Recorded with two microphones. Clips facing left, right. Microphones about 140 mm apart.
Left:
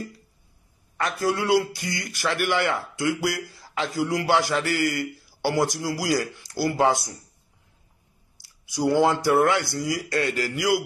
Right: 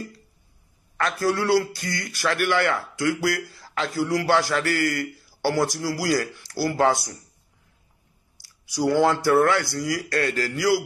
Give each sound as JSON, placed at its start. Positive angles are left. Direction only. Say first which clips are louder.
{"t": 1.2, "sound": "speech", "louder": "even", "side_deg": 20}
{"t": 8.4, "sound": "speech", "louder": "right 1 dB", "side_deg": 20}